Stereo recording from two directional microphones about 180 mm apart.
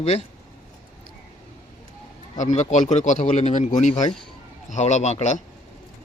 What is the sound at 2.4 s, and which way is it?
Speech, 40° left (ahead or behind).